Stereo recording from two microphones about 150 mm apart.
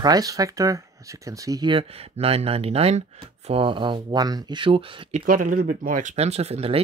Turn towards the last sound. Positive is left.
turn(degrees=-45)  # may be behind; listen again after turning